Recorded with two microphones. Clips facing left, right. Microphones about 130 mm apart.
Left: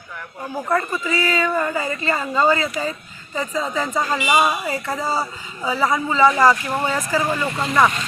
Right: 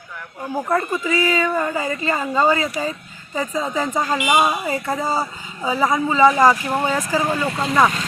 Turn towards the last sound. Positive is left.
turn(degrees=-10)  # may be behind; listen again after turning